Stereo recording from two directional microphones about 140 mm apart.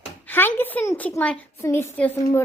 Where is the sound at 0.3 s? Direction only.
15° left (ahead or behind).